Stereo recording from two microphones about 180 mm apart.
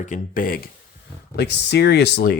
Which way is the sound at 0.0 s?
45° left (ahead or behind).